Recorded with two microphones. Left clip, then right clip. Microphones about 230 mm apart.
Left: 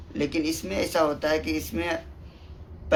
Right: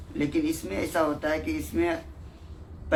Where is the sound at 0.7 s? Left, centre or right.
Left.